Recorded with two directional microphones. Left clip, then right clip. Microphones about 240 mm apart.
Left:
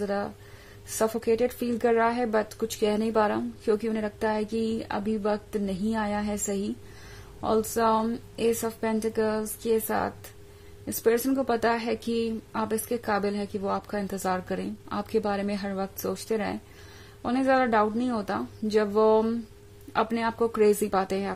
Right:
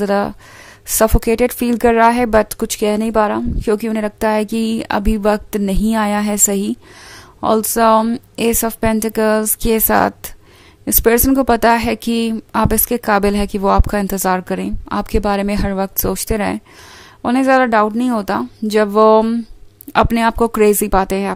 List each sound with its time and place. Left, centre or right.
0.0 s speech: right